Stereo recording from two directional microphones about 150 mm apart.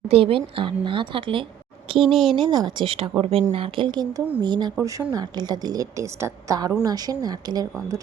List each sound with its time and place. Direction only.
0.1 s speech: 40° right (ahead or behind)
2.0 s speech: centre (ahead or behind)
2.3 s a woman's voice: 30° right (ahead or behind)